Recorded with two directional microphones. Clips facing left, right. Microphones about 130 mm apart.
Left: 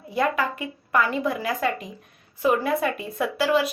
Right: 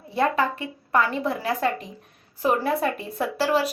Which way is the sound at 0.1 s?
30° right (ahead or behind).